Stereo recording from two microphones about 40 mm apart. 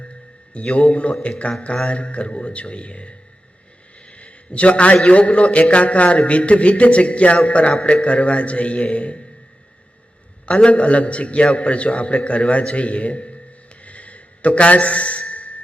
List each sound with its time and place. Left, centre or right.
0.5 s a man's voice: left
4.0 s a sound: left
5.0 s a man's voice: left
10.4 s a man's voice: left
13.8 s a sound: left
15.3 s music: left